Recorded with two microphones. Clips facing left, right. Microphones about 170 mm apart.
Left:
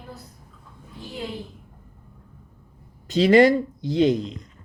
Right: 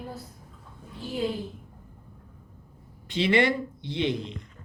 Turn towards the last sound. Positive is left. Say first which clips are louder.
# left 8 dB
turn(degrees=40)  # may be behind; listen again after turning